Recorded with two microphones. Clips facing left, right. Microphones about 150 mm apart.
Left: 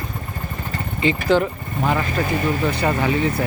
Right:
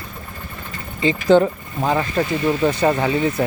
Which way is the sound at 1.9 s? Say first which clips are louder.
Right 2 dB; 30° right (ahead or behind).